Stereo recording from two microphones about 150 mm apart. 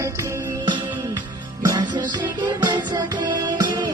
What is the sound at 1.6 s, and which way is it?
Music, 25° right (ahead or behind).